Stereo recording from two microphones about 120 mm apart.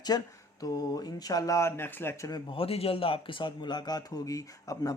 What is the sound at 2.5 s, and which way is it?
Speech, 50° left (ahead or behind).